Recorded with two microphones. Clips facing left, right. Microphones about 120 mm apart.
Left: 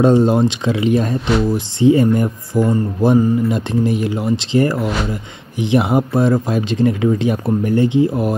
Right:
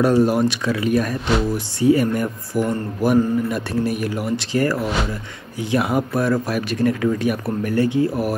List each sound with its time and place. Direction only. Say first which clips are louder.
0.0 s speech: left 4 dB; 25° left (ahead or behind)